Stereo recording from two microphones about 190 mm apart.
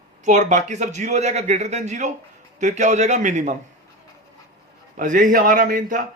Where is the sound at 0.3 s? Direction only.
40° right (ahead or behind).